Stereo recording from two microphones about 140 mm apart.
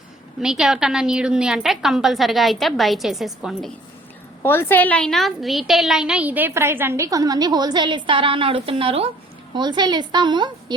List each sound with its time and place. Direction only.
0.3 s a woman's voice: 5° right (ahead or behind)
4.4 s a woman's voice: 15° left (ahead or behind); by 9.0 s 40° right (ahead or behind)
9.6 s a woman's voice: 30° right (ahead or behind)